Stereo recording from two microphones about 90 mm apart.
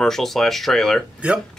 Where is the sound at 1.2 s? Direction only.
15° right (ahead or behind).